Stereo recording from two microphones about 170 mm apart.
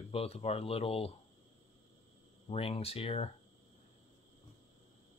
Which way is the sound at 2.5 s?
35° left (ahead or behind).